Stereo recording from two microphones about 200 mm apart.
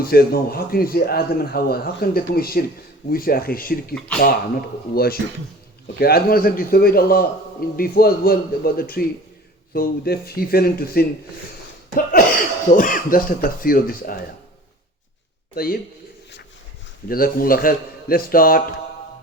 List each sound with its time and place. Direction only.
0.0 s a man's voice: 50° left (ahead or behind)
4.9 s a man's voice: 50° left (ahead or behind)
15.5 s a man's voice: 50° left (ahead or behind)
17.1 s a man's voice: 45° left (ahead or behind)